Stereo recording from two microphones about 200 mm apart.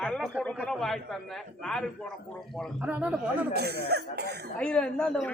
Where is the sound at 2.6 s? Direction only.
5° right (ahead or behind).